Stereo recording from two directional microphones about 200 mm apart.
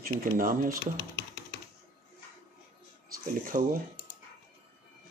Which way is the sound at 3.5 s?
40° right (ahead or behind).